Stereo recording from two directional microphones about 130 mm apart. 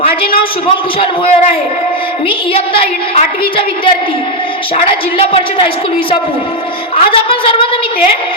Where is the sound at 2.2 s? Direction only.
45° left (ahead or behind).